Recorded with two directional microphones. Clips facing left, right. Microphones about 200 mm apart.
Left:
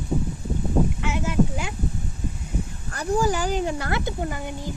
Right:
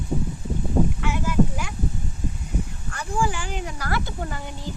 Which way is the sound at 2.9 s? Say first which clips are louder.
Left 4 dB; 40° left (ahead or behind).